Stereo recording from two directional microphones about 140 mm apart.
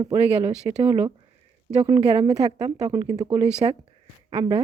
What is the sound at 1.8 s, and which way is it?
Speech, 30° right (ahead or behind).